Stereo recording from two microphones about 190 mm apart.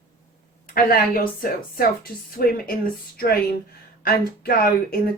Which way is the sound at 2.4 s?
50° left (ahead or behind).